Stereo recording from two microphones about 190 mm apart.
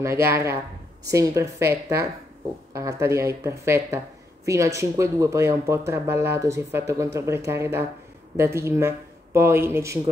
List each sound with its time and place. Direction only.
0.0 s speech: 15° right (ahead or behind)